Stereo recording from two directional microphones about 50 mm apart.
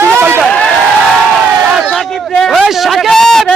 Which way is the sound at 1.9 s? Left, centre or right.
Centre.